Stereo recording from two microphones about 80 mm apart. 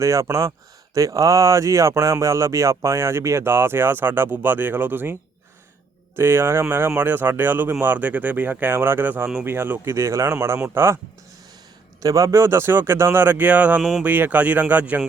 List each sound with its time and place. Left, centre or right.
0.0 s speech: right
6.1 s speech: right
12.0 s speech: right; by 15.0 s centre